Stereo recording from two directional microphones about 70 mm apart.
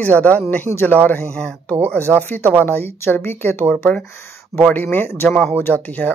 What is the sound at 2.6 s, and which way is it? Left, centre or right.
Speech, left.